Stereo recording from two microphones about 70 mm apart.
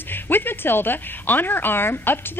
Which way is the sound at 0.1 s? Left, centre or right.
Left.